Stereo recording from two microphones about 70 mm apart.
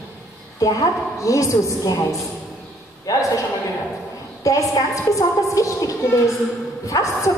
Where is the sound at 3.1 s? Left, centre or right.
Left.